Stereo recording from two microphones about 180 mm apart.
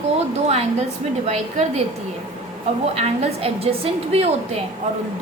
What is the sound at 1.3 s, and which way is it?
Speech, 40° right (ahead or behind).